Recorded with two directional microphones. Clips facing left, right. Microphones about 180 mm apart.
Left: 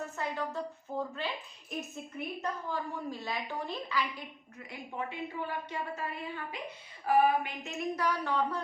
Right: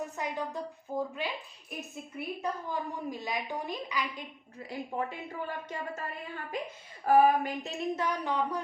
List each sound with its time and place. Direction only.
0.0 s a woman's voice: 15° right (ahead or behind)
4.5 s a woman's voice: 35° right (ahead or behind); by 8.6 s 15° right (ahead or behind)